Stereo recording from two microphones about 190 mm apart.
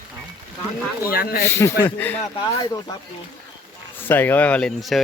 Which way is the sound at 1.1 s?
50° left (ahead or behind).